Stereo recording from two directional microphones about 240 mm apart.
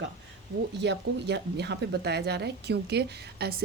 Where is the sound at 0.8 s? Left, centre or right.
Right.